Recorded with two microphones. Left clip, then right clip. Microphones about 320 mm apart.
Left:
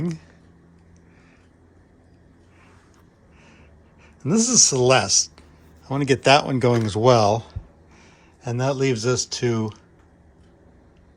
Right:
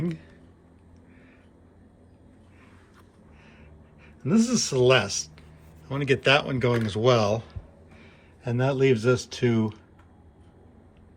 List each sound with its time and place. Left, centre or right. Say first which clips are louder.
4.2 s speech: left 7 dB; centre